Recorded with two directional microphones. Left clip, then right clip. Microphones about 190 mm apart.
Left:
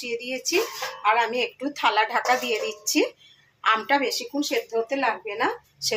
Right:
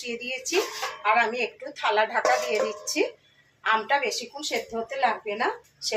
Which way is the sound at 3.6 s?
45° left (ahead or behind).